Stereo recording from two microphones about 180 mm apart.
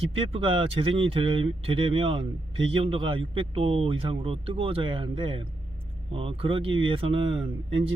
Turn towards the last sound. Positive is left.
turn(degrees=-30)  # may be behind; listen again after turning